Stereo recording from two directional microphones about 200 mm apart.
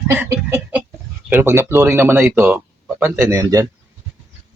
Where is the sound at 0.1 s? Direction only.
10° right (ahead or behind).